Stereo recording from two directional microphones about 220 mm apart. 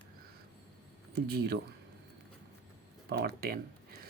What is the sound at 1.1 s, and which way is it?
Speech, 45° right (ahead or behind).